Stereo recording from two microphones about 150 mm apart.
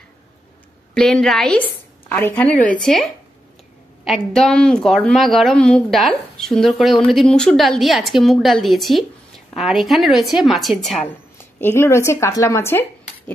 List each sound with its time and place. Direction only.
0.9 s a woman's voice: 5° left (ahead or behind)
11.6 s speech: 15° left (ahead or behind)